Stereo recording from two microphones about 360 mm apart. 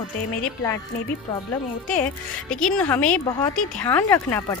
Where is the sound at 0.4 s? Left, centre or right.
Centre.